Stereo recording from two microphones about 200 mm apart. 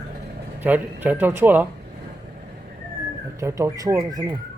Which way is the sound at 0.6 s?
10° right (ahead or behind).